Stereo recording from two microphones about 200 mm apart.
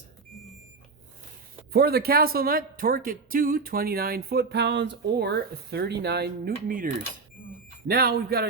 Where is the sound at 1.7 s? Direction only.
50° right (ahead or behind).